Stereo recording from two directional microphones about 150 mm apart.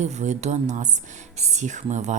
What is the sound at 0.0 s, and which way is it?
Speech, 50° right (ahead or behind).